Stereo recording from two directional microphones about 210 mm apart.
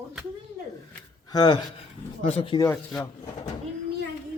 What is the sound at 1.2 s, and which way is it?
Speech, 20° left (ahead or behind).